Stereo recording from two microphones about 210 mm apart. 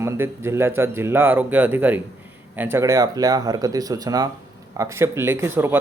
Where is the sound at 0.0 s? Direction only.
10° right (ahead or behind).